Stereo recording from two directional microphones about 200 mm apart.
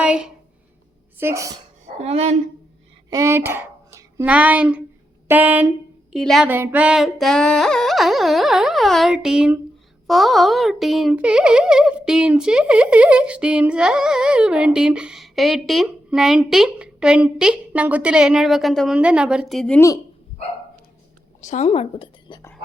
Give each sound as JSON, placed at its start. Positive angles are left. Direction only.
{"t": 0.0, "sound": "a sound", "side_deg": -5}
{"t": 1.2, "sound": "speech", "side_deg": -15}
{"t": 2.0, "sound": "speech", "side_deg": -30}
{"t": 3.1, "sound": "speech", "side_deg": -15}
{"t": 21.4, "sound": "speech", "side_deg": 35}